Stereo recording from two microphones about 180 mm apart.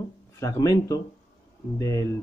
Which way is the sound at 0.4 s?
20° left (ahead or behind).